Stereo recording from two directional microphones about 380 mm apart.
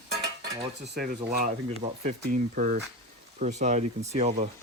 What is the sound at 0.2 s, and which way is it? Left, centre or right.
Cutlery, centre.